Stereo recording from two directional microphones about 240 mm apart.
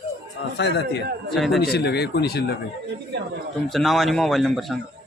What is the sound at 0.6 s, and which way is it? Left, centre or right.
Speech, left.